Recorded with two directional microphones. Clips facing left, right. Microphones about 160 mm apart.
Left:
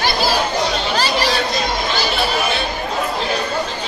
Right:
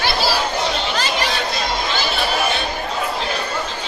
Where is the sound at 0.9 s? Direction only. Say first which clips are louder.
Left 3 dB; 35° left (ahead or behind).